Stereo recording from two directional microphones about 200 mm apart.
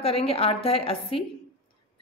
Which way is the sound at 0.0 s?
30° left (ahead or behind).